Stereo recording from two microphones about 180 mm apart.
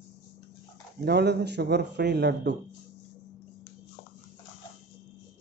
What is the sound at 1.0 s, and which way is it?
Speech, 65° right (ahead or behind).